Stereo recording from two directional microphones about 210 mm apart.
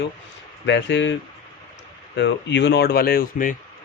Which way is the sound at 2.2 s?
55° left (ahead or behind).